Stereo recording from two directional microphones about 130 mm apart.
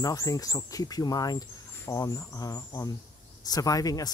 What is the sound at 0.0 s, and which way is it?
Speech, 25° left (ahead or behind).